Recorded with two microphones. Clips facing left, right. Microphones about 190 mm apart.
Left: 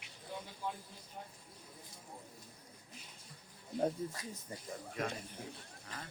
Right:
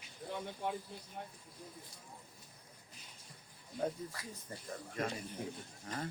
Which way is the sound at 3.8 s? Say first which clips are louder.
Left 2 dB; 25° left (ahead or behind).